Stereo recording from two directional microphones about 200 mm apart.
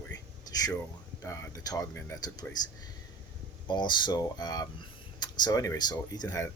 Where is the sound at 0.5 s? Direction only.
20° left (ahead or behind).